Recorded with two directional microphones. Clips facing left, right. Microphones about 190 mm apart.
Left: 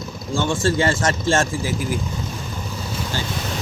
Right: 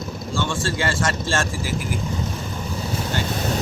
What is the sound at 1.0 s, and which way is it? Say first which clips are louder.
Speech: left 4 dB; 20° left (ahead or behind).